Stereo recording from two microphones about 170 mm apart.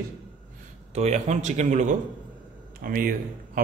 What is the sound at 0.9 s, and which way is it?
A man's voice, 40° right (ahead or behind).